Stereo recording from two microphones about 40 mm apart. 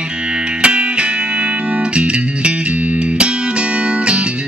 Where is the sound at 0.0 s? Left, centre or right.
Right.